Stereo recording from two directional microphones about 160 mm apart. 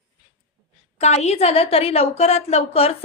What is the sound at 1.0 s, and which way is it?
A woman's voice, 45° left (ahead or behind).